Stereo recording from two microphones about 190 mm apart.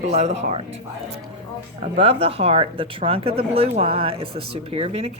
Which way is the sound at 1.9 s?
30° right (ahead or behind).